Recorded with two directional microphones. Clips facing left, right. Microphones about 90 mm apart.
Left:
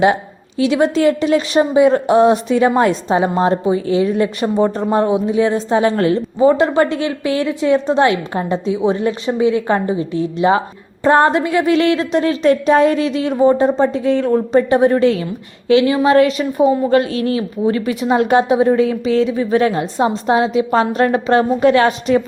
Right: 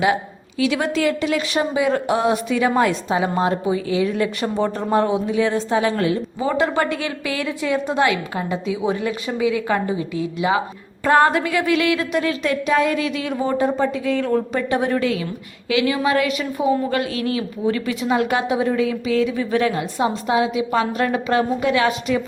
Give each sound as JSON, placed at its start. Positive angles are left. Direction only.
{"t": 0.6, "sound": "a woman's voice", "side_deg": 20}
{"t": 4.0, "sound": "a woman's voice", "side_deg": 20}
{"t": 5.7, "sound": "a woman's voice", "side_deg": 35}
{"t": 6.4, "sound": "a woman's voice", "side_deg": 20}